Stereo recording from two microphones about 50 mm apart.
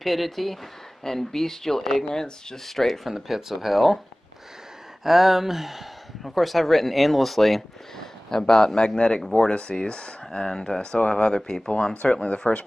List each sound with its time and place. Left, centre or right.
0.0 s speech: centre
5.0 s speech: centre
11.9 s speech: left